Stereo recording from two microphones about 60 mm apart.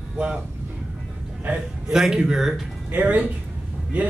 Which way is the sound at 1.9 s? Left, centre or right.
Centre.